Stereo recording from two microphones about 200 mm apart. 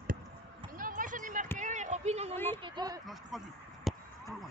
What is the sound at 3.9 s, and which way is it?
Basketball bounce, centre (ahead or behind).